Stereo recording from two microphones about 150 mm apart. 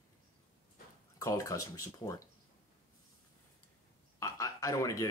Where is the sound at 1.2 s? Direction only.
20° left (ahead or behind).